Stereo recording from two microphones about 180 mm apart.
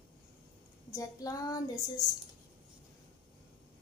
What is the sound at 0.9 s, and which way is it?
Speech, 20° left (ahead or behind).